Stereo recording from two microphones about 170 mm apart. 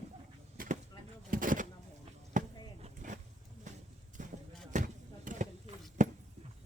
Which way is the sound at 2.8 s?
45° right (ahead or behind).